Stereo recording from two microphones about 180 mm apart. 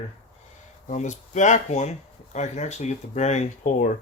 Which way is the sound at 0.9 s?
40° left (ahead or behind).